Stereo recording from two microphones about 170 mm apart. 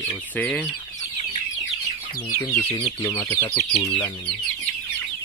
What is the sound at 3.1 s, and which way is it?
Speech, 15° left (ahead or behind).